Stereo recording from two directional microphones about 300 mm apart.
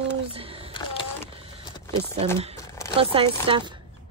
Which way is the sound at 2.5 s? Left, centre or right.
Centre.